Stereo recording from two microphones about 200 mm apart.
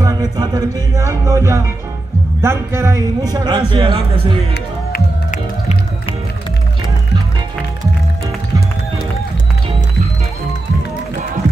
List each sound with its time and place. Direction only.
0.0 s music: 20° right (ahead or behind)
2.4 s speech: 15° right (ahead or behind)
4.9 s music: 35° left (ahead or behind)